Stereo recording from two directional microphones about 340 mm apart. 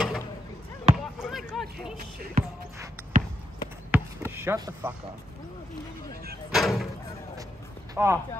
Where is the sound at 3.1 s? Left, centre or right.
Right.